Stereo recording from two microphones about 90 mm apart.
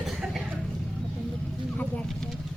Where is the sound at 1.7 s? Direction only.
10° left (ahead or behind).